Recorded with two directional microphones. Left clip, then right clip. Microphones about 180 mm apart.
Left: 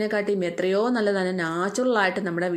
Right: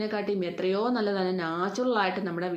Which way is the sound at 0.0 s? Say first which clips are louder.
Left 5 dB; 30° left (ahead or behind).